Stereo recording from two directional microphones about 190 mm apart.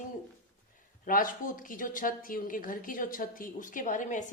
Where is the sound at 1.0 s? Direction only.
45° left (ahead or behind).